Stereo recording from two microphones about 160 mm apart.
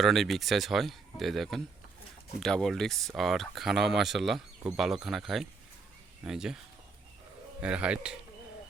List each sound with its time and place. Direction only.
0.0 s speech: centre (ahead or behind)
7.6 s a man's voice: 5° right (ahead or behind)